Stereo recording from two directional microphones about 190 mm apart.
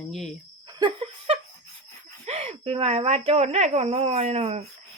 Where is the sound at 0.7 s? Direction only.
25° right (ahead or behind).